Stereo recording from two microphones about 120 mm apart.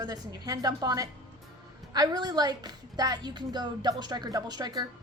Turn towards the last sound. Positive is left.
turn(degrees=-35)  # may be behind; listen again after turning